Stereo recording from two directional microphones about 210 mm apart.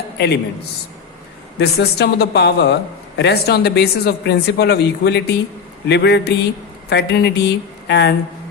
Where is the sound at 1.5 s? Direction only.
50° left (ahead or behind).